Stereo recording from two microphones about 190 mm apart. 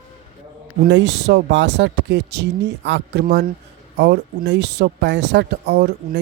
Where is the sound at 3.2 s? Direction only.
45° right (ahead or behind).